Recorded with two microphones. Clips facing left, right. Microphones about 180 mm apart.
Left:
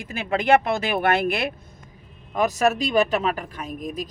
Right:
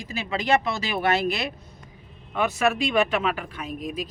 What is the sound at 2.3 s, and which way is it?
Speech, 40° left (ahead or behind).